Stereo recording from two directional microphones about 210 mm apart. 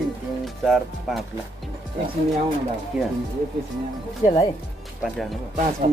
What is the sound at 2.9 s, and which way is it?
Speech, 5° right (ahead or behind).